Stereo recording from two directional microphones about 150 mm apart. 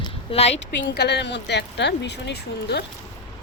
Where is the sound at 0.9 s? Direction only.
90° left.